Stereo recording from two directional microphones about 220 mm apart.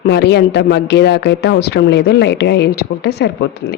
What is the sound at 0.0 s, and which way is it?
A woman's voice, 50° left (ahead or behind).